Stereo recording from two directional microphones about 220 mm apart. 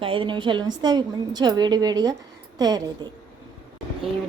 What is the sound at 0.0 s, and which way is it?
A woman's voice, 25° right (ahead or behind).